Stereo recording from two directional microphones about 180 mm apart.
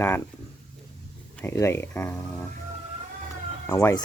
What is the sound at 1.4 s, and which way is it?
Speech, 15° left (ahead or behind).